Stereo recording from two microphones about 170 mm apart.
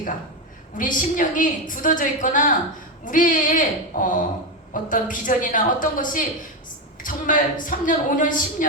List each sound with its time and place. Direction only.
0.8 s a woman's voice: 50° left (ahead or behind)